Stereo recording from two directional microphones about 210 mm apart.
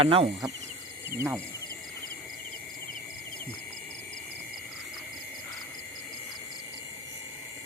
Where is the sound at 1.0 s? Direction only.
10° right (ahead or behind).